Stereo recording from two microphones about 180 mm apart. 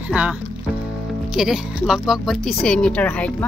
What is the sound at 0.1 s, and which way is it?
Speech, 5° right (ahead or behind).